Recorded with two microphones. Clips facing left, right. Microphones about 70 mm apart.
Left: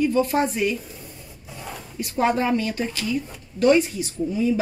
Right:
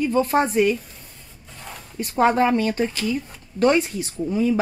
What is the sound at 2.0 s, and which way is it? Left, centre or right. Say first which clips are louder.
Speech: right 4 dB; right.